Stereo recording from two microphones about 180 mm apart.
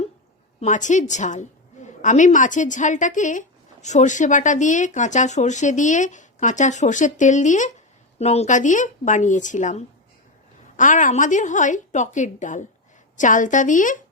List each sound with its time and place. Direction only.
0.6 s a woman's voice: 45° left (ahead or behind)